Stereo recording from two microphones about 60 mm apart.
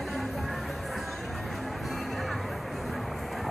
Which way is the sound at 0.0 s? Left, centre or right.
Centre.